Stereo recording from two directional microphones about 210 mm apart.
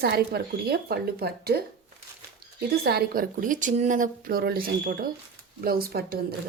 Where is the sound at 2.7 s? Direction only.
50° right (ahead or behind).